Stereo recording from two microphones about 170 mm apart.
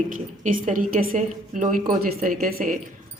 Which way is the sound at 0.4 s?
50° right (ahead or behind).